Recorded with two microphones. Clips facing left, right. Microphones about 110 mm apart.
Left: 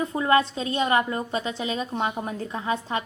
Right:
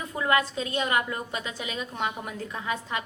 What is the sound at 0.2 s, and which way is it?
A woman's voice, 30° left (ahead or behind).